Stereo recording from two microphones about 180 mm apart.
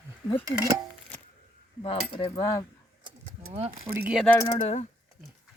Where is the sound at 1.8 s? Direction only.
25° left (ahead or behind).